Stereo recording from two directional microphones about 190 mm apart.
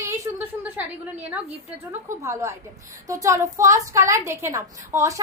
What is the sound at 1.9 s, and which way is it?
A woman's voice, 15° right (ahead or behind).